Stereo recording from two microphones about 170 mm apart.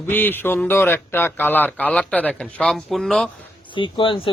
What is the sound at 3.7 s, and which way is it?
Speech, 30° left (ahead or behind).